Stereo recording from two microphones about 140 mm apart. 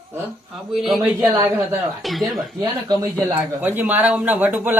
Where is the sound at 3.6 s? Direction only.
15° right (ahead or behind).